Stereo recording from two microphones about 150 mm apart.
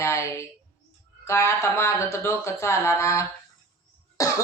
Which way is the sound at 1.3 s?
20° left (ahead or behind).